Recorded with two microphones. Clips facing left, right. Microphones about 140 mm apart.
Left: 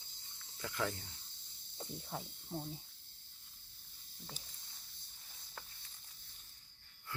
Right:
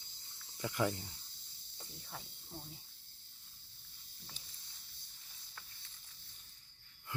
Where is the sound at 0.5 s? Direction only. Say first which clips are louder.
Right 4 dB; 20° right (ahead or behind).